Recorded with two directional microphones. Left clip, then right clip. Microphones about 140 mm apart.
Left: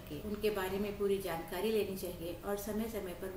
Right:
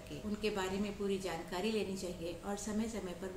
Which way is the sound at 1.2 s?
15° right (ahead or behind).